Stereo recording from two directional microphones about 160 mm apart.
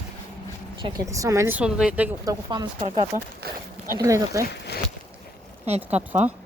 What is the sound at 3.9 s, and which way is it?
Speech, 20° right (ahead or behind).